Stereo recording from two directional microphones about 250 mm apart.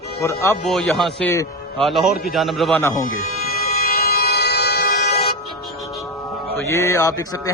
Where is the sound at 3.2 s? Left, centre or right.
Left.